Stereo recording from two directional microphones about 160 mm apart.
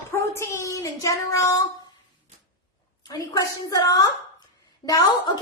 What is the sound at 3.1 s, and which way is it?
Speech, 25° left (ahead or behind).